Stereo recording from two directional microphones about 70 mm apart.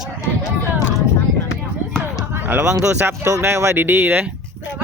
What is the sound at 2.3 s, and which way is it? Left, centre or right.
Speech, right.